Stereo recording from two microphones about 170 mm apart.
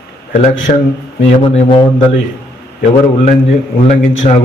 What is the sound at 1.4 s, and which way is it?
Speech, 30° left (ahead or behind).